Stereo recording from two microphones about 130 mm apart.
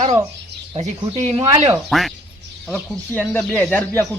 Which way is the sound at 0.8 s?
60° right (ahead or behind).